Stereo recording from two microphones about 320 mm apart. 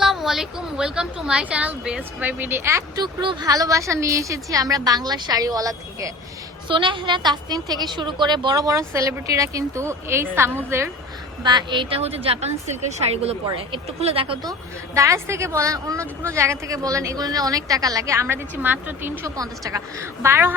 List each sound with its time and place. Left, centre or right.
0.0 s a woman's voice: centre